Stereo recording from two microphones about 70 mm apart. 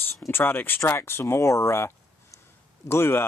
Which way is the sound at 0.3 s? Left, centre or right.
Left.